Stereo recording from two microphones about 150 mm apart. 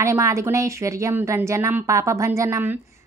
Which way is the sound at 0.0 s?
20° right (ahead or behind).